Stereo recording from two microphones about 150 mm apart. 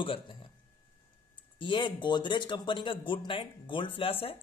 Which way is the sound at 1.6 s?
35° left (ahead or behind).